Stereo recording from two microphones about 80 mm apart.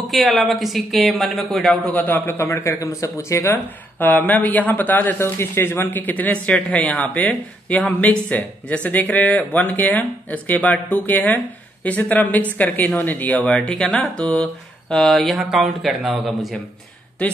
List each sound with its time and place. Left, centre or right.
0.0 s speech: centre
2.0 s a man's voice: left
4.0 s a man's voice: left; by 16.5 s centre